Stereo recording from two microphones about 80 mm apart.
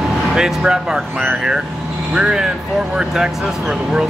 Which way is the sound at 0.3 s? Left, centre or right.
Centre.